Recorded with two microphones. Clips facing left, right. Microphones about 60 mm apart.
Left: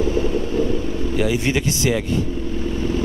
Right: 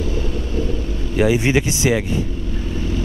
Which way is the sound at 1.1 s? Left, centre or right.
Right.